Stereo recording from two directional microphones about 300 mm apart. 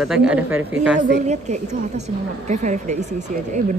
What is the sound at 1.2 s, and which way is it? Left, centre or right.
Speech, right.